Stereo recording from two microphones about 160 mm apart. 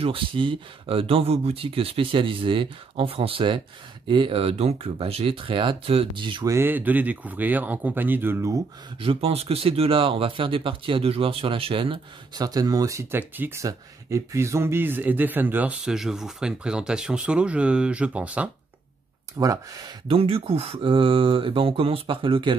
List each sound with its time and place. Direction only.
0.0 s speech: 35° right (ahead or behind)
6.5 s speech: 15° right (ahead or behind)
9.0 s speech: 35° right (ahead or behind); by 18.5 s 10° right (ahead or behind)
19.3 s speech: 20° right (ahead or behind)
20.1 s speech: 35° right (ahead or behind)